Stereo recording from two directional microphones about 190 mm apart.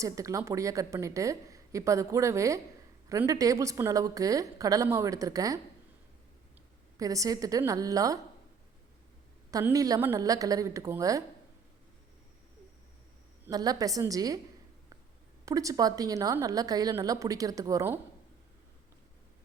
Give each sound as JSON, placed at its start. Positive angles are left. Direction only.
{"t": 0.0, "sound": "a woman's voice", "side_deg": -15}
{"t": 6.9, "sound": "a woman's voice", "side_deg": -15}
{"t": 9.5, "sound": "a woman's voice", "side_deg": -20}
{"t": 13.5, "sound": "a woman's voice", "side_deg": -20}
{"t": 15.4, "sound": "a woman's voice", "side_deg": -15}